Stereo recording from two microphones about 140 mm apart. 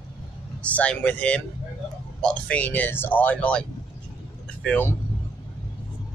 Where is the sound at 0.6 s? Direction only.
10° left (ahead or behind).